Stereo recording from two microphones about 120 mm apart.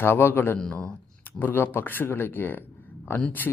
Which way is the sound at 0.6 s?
5° left (ahead or behind).